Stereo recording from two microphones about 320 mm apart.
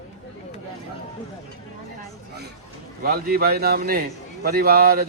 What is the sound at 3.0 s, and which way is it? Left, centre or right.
Speech, right.